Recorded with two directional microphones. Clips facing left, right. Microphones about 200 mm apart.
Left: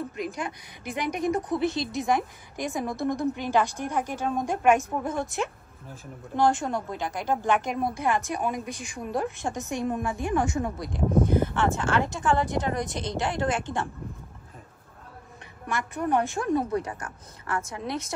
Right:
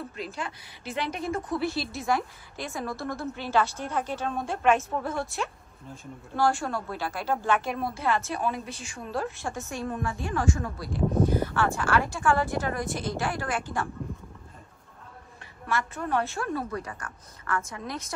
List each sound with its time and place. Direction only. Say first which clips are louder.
0.1 s a woman's voice: left 3 dB; 15° left (ahead or behind)
15.6 s a woman's voice: left 1 dB; 15° left (ahead or behind)